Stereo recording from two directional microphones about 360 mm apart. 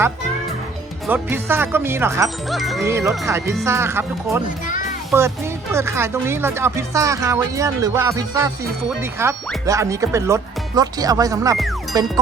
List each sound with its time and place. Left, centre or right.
1.0 s speech: centre
4.4 s a child's voice: left
5.7 s speech: centre